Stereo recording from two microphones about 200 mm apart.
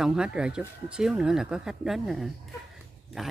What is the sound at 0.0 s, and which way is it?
Speech, 5° right (ahead or behind).